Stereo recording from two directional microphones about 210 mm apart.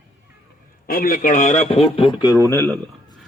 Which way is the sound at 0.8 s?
45° left (ahead or behind).